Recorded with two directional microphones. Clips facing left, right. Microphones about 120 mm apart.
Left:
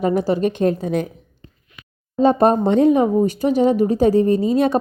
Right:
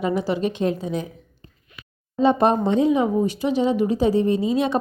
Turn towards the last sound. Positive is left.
turn(degrees=45)  # may be behind; listen again after turning